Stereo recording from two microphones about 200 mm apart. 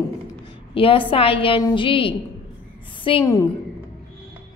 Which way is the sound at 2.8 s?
25° left (ahead or behind).